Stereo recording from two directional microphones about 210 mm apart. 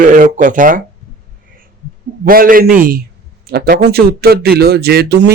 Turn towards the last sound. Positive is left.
turn(degrees=-50)  # may be behind; listen again after turning